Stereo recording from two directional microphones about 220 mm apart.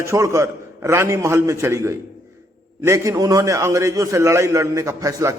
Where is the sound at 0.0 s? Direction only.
15° right (ahead or behind).